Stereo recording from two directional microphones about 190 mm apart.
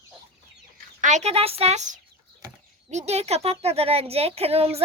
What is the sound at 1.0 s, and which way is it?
Speech, 35° right (ahead or behind).